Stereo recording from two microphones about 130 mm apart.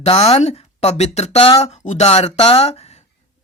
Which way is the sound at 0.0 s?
50° left (ahead or behind).